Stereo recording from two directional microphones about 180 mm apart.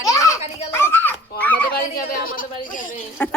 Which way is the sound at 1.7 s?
55° left (ahead or behind).